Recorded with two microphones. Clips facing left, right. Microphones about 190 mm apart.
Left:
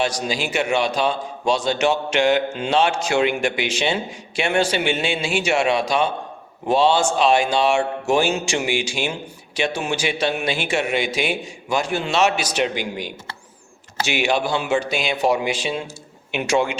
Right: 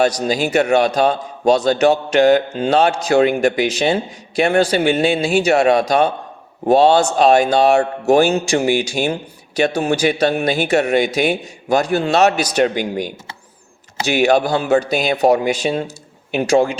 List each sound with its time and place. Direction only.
0.0 s a man's voice: 40° right (ahead or behind)